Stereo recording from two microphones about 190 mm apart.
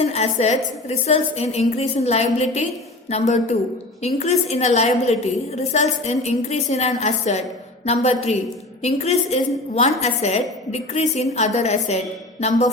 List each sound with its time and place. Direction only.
0.0 s a woman's voice: 35° left (ahead or behind)